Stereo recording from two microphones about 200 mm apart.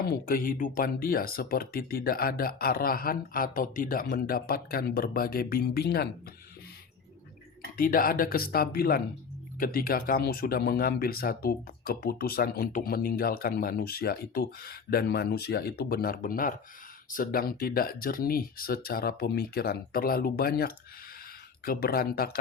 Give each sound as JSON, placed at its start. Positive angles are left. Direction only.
{"t": 0.0, "sound": "speech", "side_deg": 45}
{"t": 7.8, "sound": "speech", "side_deg": 45}